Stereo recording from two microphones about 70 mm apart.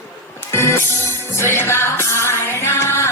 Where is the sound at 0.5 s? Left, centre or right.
Left.